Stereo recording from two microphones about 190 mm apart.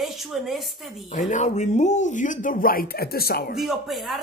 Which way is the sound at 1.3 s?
40° left (ahead or behind).